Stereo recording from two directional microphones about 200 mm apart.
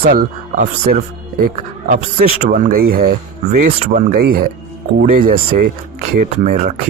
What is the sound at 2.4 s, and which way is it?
Speech, 45° right (ahead or behind).